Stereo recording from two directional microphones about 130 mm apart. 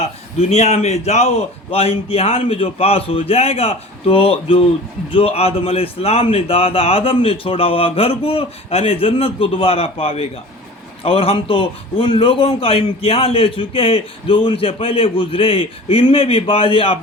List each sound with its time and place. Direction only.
0.5 s a man's voice: 55° left (ahead or behind)